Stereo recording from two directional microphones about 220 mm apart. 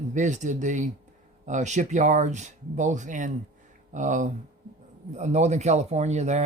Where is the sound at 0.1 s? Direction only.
35° right (ahead or behind).